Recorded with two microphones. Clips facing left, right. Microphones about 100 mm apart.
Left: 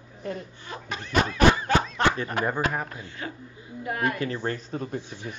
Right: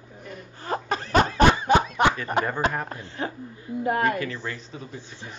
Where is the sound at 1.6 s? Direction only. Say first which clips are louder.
Right 4 dB; 15° right (ahead or behind).